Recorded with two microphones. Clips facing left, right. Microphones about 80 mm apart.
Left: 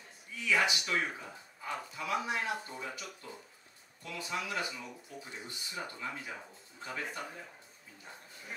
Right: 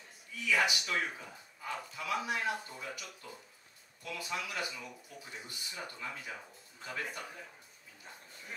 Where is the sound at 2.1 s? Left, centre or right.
Left.